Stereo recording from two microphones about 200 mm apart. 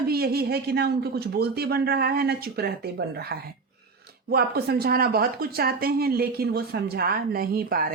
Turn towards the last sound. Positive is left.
turn(degrees=-45)  # may be behind; listen again after turning